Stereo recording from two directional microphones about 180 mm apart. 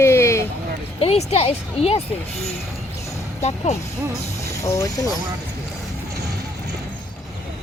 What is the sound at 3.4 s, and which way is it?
Speech, 35° left (ahead or behind).